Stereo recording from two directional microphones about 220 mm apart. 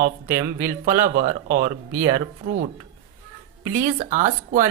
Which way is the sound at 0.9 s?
40° right (ahead or behind).